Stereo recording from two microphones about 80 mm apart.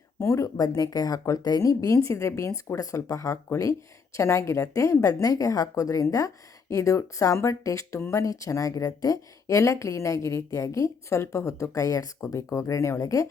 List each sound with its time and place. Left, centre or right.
0.2 s a woman's voice: left
0.6 s a woman's voice: left